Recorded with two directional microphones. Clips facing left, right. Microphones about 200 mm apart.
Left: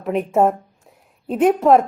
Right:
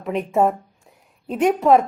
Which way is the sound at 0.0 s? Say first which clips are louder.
Left 2 dB; centre (ahead or behind).